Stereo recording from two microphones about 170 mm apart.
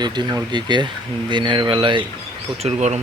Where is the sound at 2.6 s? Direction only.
40° right (ahead or behind).